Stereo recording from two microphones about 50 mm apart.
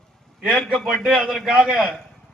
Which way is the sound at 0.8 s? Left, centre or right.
Centre.